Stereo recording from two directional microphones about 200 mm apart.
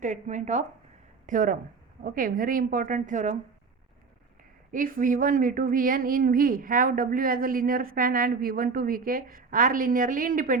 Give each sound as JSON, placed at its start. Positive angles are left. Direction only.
{"t": 0.0, "sound": "a woman's voice", "side_deg": -40}
{"t": 4.7, "sound": "a woman's voice", "side_deg": -45}